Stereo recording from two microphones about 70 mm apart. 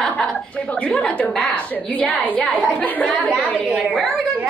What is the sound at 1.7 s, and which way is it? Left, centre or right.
A woman's voice, left.